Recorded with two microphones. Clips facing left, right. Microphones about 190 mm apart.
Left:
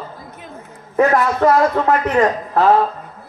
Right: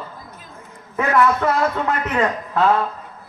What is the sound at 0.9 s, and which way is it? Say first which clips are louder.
Speech: left 3 dB; 40° left (ahead or behind).